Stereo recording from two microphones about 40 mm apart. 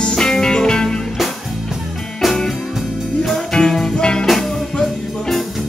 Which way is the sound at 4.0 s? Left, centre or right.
Centre.